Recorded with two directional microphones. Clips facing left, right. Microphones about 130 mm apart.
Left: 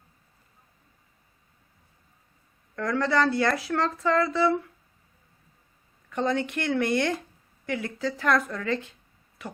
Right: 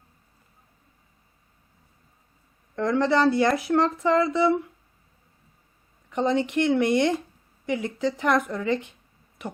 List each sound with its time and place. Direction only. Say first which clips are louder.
2.7 s speech: right 3 dB; 20° right (ahead or behind)
6.1 s speech: right 3 dB; 20° right (ahead or behind)